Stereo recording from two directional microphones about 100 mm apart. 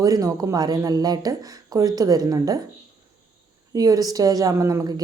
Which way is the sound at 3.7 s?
35° right (ahead or behind).